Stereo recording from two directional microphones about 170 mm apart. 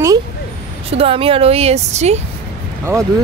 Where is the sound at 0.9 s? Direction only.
35° right (ahead or behind).